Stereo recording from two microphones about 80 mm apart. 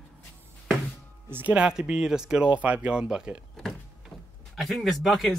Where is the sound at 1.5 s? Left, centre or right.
Centre.